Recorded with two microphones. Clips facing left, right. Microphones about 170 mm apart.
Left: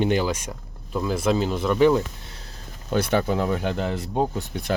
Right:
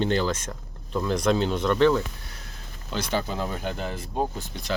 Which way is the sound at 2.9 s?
60° left (ahead or behind).